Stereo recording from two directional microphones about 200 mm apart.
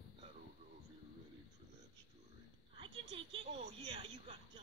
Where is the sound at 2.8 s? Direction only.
25° right (ahead or behind).